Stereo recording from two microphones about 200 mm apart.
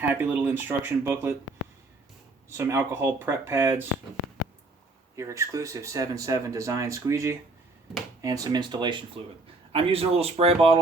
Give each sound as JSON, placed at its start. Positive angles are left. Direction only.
{"t": 0.0, "sound": "speech", "side_deg": -10}
{"t": 2.5, "sound": "speech", "side_deg": -10}
{"t": 5.1, "sound": "speech", "side_deg": -15}